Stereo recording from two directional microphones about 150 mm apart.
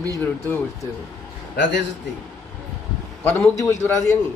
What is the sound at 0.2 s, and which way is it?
Speech, 10° left (ahead or behind).